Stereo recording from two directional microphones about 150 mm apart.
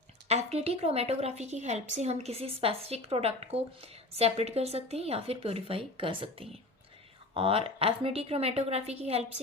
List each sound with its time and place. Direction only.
0.3 s a woman's voice: 45° right (ahead or behind)